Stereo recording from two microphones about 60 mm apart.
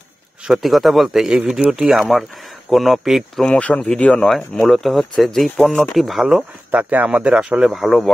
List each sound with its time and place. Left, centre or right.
0.5 s speech: centre
3.4 s speech: left
4.3 s speech: centre
6.7 s speech: right
7.7 s speech: centre